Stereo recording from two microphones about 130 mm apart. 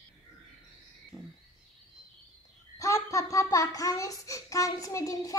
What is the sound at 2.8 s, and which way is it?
Child singing, 25° left (ahead or behind).